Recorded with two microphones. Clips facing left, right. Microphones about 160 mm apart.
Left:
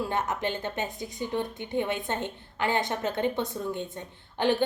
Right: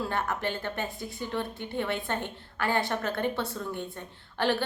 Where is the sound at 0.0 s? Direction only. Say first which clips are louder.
Left 1 dB; 20° left (ahead or behind).